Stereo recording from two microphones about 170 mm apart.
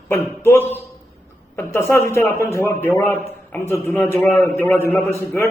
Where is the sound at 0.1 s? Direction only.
15° left (ahead or behind).